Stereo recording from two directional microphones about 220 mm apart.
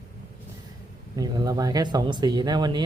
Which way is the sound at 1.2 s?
15° right (ahead or behind).